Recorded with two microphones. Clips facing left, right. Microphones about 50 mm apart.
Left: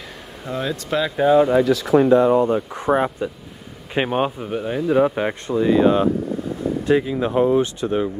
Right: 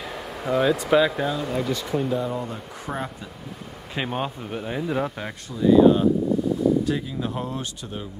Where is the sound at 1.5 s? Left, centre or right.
Left.